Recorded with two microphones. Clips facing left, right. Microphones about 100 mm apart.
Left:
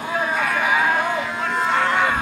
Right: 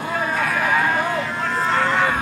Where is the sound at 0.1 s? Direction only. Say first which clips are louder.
Left 1 dB; 5° left (ahead or behind).